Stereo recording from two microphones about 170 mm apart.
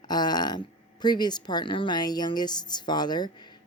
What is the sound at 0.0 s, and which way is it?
Speech, 25° left (ahead or behind).